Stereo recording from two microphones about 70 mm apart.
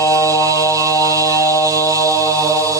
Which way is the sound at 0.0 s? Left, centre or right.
Right.